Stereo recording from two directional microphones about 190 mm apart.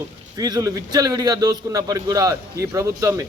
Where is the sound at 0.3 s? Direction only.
20° right (ahead or behind).